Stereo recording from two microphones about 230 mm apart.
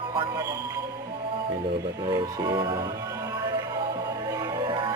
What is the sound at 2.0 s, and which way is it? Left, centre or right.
Music, centre.